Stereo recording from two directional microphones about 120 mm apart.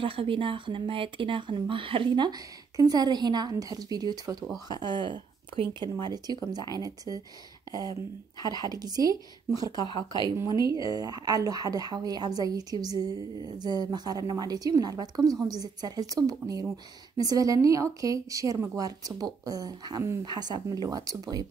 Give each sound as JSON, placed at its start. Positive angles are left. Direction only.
{"t": 0.0, "sound": "a woman's voice", "side_deg": -50}
{"t": 8.5, "sound": "a woman's voice", "side_deg": -35}
{"t": 9.8, "sound": "speech", "side_deg": 40}
{"t": 10.7, "sound": "a woman's voice", "side_deg": -30}